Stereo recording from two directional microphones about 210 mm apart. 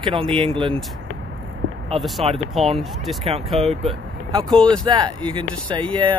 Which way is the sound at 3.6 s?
25° right (ahead or behind).